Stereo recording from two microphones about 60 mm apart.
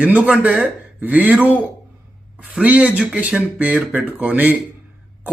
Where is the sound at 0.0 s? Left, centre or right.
Right.